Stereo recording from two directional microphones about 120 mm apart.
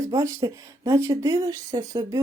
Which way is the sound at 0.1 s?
30° right (ahead or behind).